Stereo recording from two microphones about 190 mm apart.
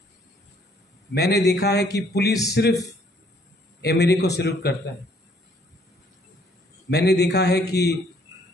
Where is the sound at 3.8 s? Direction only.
60° left (ahead or behind).